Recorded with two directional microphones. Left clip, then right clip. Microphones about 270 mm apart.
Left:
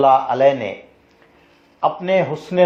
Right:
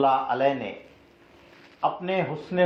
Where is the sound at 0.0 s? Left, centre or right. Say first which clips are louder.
Left 9 dB; left.